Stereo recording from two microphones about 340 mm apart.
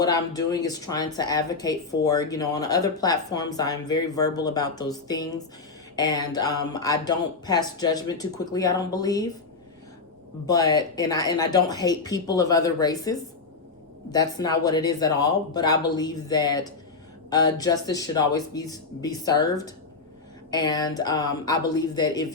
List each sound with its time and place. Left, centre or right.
0.0 s speech: centre
10.4 s speech: centre